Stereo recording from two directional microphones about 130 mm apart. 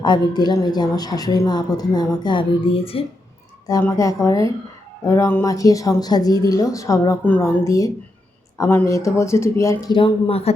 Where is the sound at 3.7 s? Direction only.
25° left (ahead or behind).